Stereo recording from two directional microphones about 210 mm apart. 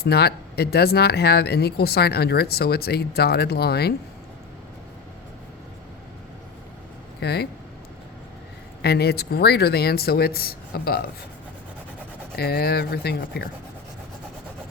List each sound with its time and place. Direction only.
0.0 s speech: 50° left (ahead or behind)
7.2 s speech: 50° left (ahead or behind)
8.8 s speech: 50° left (ahead or behind)
12.4 s speech: 50° left (ahead or behind)